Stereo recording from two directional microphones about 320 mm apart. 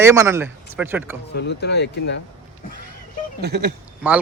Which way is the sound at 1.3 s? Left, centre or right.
Left.